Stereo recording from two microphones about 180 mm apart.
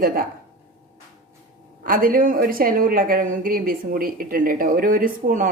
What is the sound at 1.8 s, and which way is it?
A woman's voice, 50° right (ahead or behind).